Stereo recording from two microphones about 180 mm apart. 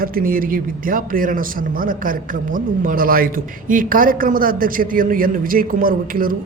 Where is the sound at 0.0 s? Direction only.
50° right (ahead or behind).